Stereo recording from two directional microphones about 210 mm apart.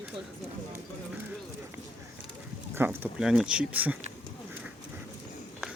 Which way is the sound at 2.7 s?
10° right (ahead or behind).